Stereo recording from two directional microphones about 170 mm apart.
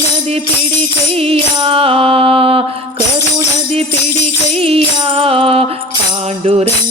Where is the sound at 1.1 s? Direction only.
35° right (ahead or behind).